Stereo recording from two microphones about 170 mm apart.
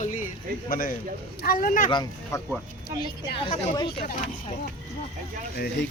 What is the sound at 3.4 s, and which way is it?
Speech, 30° left (ahead or behind).